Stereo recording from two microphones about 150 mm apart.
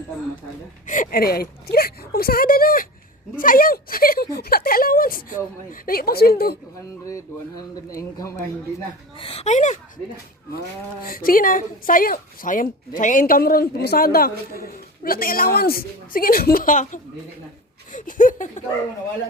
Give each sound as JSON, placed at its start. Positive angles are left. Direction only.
{"t": 0.9, "sound": "speech", "side_deg": 70}
{"t": 7.0, "sound": "speech", "side_deg": 20}
{"t": 9.1, "sound": "speech", "side_deg": 40}
{"t": 11.0, "sound": "speech", "side_deg": 75}